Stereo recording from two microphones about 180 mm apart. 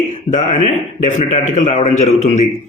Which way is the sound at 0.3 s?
40° left (ahead or behind).